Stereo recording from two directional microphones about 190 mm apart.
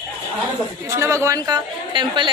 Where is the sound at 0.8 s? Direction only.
15° right (ahead or behind).